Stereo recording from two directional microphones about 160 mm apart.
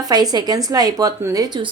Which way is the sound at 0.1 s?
25° right (ahead or behind).